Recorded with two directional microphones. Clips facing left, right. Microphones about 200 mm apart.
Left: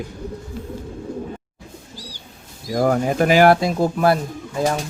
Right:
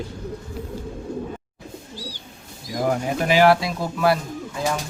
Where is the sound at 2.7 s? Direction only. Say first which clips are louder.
Left 5 dB; 50° left (ahead or behind).